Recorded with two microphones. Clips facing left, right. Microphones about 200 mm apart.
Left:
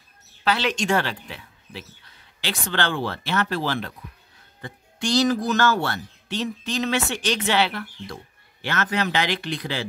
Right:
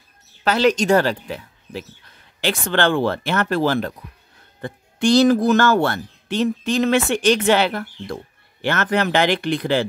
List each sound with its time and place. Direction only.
0.4 s speech: 45° right (ahead or behind)